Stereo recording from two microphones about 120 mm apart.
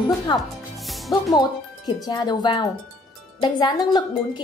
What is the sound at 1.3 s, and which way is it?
Speech, 35° left (ahead or behind).